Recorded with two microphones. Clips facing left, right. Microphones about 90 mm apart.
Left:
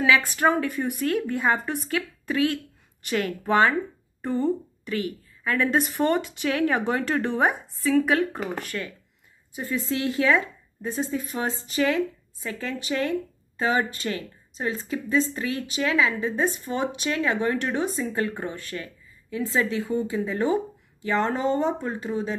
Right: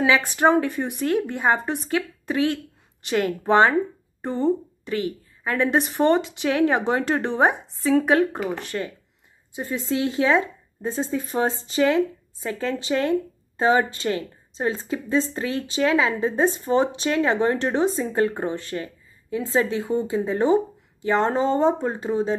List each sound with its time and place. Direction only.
0.0 s a woman's voice: 25° right (ahead or behind)